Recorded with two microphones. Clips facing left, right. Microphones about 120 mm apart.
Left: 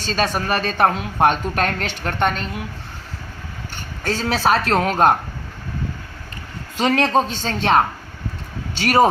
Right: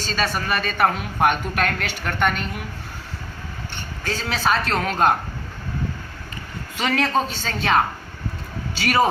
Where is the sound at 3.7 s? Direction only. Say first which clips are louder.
Left 4 dB; 40° left (ahead or behind).